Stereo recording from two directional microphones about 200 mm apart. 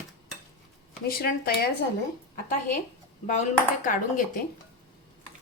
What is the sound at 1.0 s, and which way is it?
Speech, 50° left (ahead or behind).